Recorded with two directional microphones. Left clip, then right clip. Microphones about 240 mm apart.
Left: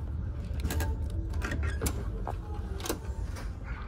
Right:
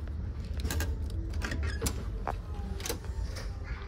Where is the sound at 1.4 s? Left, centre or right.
Centre.